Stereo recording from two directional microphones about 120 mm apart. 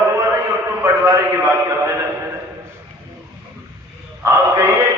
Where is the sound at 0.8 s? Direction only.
25° right (ahead or behind).